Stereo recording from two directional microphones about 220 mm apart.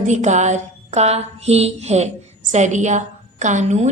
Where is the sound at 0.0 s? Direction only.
30° right (ahead or behind).